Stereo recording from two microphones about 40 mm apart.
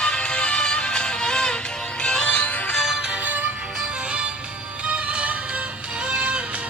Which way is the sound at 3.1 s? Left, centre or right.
Right.